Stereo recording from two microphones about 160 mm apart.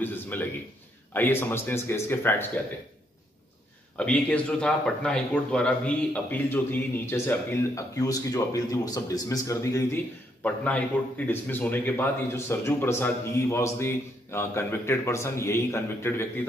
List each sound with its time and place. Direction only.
0.0 s a man's voice: 10° left (ahead or behind)
3.9 s a man's voice: 5° left (ahead or behind)
10.4 s a man's voice: 10° left (ahead or behind)